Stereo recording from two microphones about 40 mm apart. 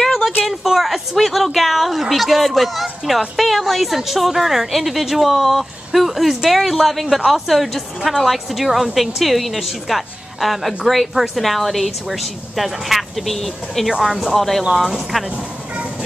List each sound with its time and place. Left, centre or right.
0.0 s a sound: centre
0.5 s a woman's voice: centre
14.6 s speech: centre